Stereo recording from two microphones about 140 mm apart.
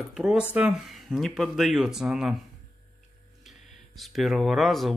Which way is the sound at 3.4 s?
Centre (ahead or behind).